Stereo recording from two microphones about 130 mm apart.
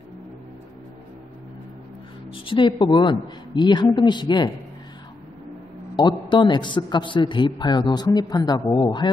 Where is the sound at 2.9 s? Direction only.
35° left (ahead or behind).